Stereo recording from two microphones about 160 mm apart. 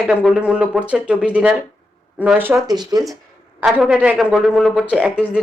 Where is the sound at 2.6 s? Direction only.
25° right (ahead or behind).